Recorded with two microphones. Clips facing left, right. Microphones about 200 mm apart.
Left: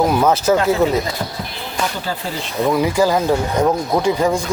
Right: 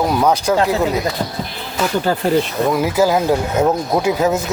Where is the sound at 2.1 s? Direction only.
55° right (ahead or behind).